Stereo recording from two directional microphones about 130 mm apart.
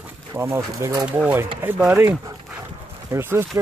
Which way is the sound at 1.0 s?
10° right (ahead or behind).